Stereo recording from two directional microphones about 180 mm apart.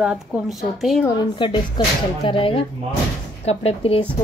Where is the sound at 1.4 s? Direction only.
25° left (ahead or behind).